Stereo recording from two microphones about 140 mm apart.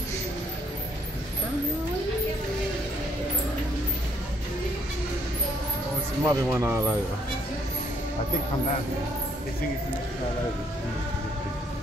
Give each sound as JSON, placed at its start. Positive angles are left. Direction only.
{"t": 6.2, "sound": "speech", "side_deg": -20}